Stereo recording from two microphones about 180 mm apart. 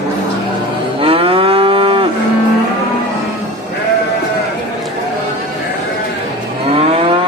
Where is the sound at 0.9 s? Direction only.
30° right (ahead or behind).